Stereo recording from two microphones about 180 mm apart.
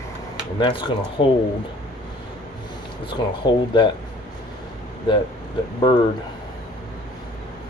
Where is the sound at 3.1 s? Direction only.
25° left (ahead or behind).